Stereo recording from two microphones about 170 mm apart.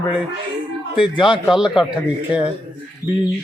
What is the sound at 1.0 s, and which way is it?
Speech, 30° left (ahead or behind).